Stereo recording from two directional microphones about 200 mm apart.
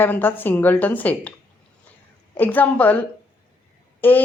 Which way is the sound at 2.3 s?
10° left (ahead or behind).